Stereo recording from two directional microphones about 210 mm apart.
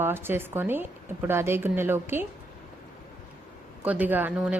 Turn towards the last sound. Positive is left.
turn(degrees=-5)  # may be behind; listen again after turning